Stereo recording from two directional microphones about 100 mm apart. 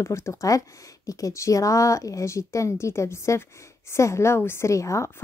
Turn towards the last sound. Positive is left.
turn(degrees=30)  # may be behind; listen again after turning